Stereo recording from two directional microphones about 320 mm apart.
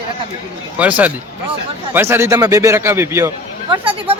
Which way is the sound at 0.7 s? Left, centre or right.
Centre.